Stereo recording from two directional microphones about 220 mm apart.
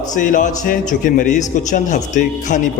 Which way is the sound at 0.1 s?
35° left (ahead or behind).